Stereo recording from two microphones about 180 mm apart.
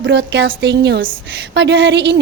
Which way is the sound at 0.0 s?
75° right (ahead or behind).